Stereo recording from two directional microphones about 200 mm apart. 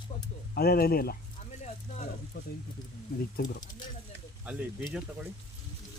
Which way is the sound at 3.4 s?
20° left (ahead or behind).